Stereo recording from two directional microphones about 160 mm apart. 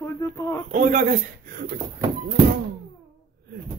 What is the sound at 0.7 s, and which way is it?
Speech, 55° right (ahead or behind).